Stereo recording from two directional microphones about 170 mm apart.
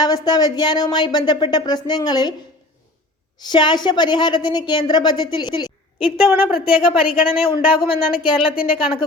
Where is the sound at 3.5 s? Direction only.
25° left (ahead or behind).